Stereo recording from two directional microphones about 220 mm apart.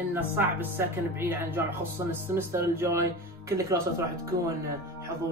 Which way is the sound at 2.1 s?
10° right (ahead or behind).